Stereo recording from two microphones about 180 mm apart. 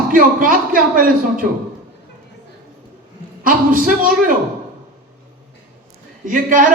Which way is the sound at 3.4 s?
50° right (ahead or behind).